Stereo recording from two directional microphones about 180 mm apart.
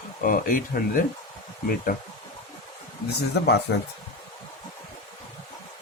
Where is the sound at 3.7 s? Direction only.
65° left (ahead or behind).